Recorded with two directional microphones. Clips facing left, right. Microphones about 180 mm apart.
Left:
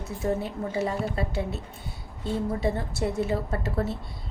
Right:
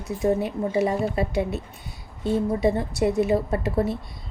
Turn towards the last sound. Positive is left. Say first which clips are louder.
# right 5 dB
turn(degrees=-15)  # may be behind; listen again after turning